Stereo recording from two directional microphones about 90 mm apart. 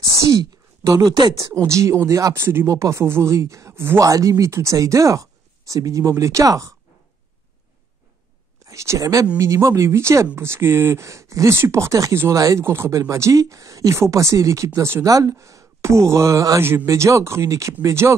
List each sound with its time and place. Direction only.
0.1 s speech: 40° right (ahead or behind)
4.1 s speech: 40° right (ahead or behind)
8.6 s speech: 35° right (ahead or behind)
15.0 s speech: 40° right (ahead or behind)